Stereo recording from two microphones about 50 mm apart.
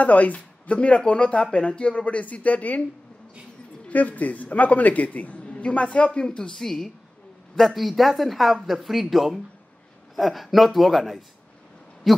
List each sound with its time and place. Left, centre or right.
0.0 s speech: left
3.9 s a man's voice: left
6.2 s speech: centre
12.1 s owl: centre